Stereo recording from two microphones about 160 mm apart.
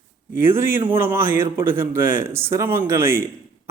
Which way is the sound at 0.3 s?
15° right (ahead or behind).